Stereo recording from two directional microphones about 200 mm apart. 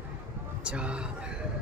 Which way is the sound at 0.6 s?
5° right (ahead or behind).